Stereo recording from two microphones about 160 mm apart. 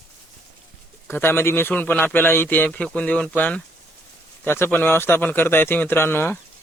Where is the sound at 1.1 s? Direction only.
15° left (ahead or behind).